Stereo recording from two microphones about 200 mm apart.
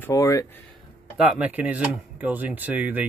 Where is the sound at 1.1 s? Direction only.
5° right (ahead or behind).